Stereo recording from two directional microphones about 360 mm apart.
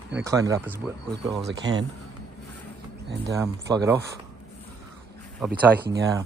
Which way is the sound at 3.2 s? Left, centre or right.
Centre.